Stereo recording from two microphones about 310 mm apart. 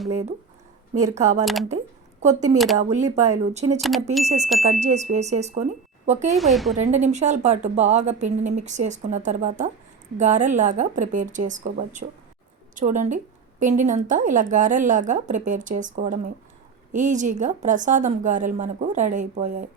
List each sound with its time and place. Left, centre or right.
1.1 s speech: right
1.5 s speech: centre
2.2 s speech: right
3.8 s speech: centre
4.2 s speech: right
6.3 s speech: centre
6.7 s speech: right